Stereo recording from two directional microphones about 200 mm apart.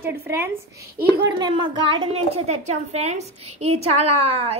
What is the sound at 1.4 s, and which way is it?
A woman's voice, 25° right (ahead or behind).